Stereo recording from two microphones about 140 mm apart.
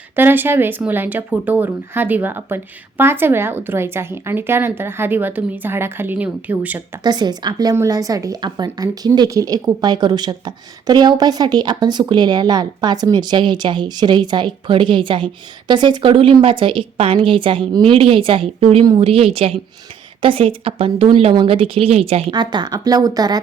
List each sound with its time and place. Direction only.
0.2 s a woman's voice: 15° right (ahead or behind)
7.0 s a woman's voice: 30° right (ahead or behind); by 22.2 s 45° right (ahead or behind)
22.3 s speech: 30° right (ahead or behind)